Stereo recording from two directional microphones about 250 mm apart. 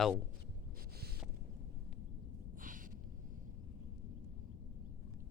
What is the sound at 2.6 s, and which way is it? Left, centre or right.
Snort, right.